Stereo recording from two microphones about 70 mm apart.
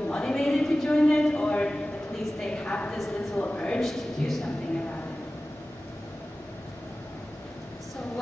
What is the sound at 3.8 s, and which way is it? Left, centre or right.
Speech, centre.